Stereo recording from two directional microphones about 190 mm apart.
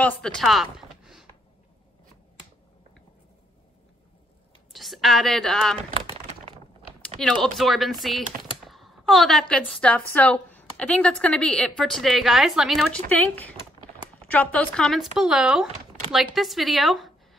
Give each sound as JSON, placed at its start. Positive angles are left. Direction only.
{"t": 0.0, "sound": "speech", "side_deg": 5}
{"t": 4.7, "sound": "speech", "side_deg": 0}
{"t": 5.8, "sound": "typing", "side_deg": -35}
{"t": 7.4, "sound": "a woman's voice", "side_deg": 0}